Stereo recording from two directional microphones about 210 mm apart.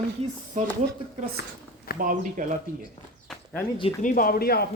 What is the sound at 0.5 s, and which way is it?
Speech, 40° right (ahead or behind).